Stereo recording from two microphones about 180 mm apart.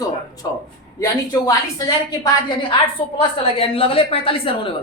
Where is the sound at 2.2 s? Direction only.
30° left (ahead or behind).